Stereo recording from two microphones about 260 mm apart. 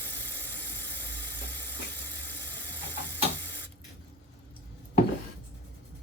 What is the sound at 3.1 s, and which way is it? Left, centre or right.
Printer, centre.